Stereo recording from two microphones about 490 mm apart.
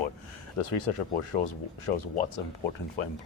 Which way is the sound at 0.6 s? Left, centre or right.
Left.